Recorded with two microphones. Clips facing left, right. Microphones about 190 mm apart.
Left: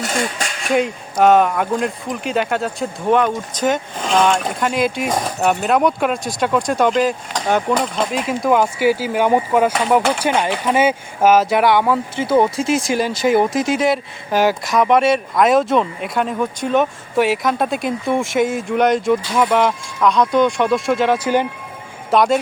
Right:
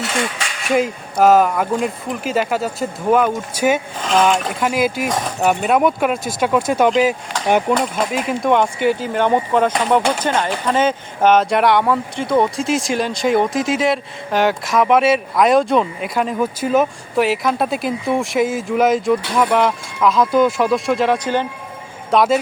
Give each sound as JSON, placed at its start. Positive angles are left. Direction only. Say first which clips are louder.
{"t": 0.0, "sound": "speech", "louder": "even", "side_deg": 45}
{"t": 0.7, "sound": "speech", "louder": "right 1 dB", "side_deg": 0}